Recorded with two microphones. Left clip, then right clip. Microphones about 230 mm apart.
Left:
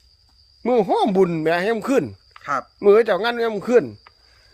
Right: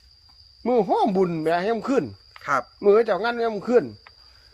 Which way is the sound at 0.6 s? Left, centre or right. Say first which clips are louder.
Left 2 dB; left.